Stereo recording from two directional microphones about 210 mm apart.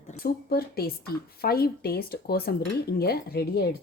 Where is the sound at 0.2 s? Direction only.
45° left (ahead or behind).